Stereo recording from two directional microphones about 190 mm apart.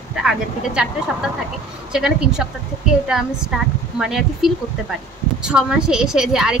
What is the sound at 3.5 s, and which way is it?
A woman's voice, 5° right (ahead or behind).